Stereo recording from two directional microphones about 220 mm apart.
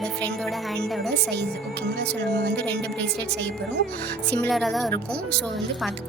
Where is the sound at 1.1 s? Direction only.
50° right (ahead or behind).